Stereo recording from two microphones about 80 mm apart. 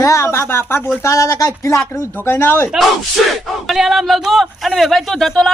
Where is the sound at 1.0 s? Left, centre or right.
Left.